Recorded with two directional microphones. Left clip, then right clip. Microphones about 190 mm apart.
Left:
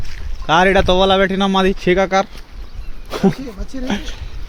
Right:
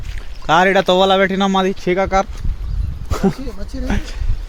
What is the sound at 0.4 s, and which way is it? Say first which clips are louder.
A man's voice: even; 5° right (ahead or behind).